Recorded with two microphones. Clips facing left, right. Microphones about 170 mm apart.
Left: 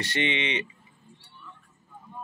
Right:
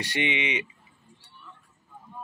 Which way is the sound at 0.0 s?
15° right (ahead or behind).